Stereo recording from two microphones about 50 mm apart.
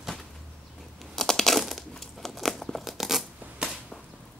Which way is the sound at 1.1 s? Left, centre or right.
Centre.